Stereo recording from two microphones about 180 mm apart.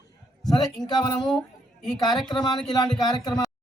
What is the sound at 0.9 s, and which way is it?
Speech, 25° left (ahead or behind).